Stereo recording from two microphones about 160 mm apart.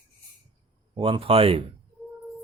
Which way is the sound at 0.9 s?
30° right (ahead or behind).